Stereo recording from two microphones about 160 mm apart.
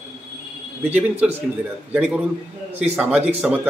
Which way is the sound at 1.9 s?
5° right (ahead or behind).